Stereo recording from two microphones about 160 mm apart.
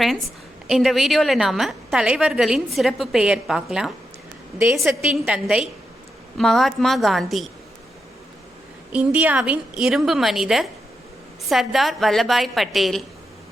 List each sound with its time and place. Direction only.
0.7 s a woman's voice: centre (ahead or behind)
4.5 s a woman's voice: 15° right (ahead or behind); by 7.4 s centre (ahead or behind)
8.9 s a woman's voice: 10° right (ahead or behind)